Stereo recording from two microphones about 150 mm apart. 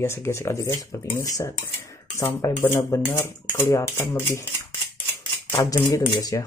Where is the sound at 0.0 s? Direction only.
15° left (ahead or behind).